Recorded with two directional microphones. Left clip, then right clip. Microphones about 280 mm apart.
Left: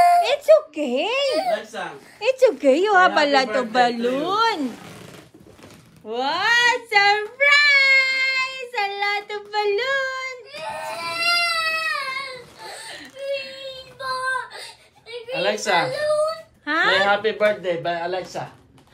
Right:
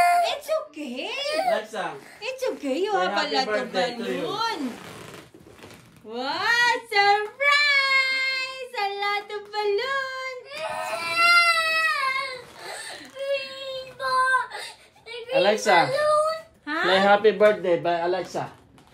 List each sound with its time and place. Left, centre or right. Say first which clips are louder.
0.0 s a sound: left 5 dB; centre
1.3 s a sound: left 2 dB; centre
2.1 s a woman's voice: left 13 dB; centre
6.1 s child singing: left 4 dB; centre
11.1 s a sound: right 3 dB; centre
12.6 s whimper: left 1 dB; centre
14.0 s child singing: right 3 dB; centre
15.3 s a woman's voice: right 2 dB; right
16.6 s speech: left 3 dB; centre
17.0 s speech: right 1 dB; right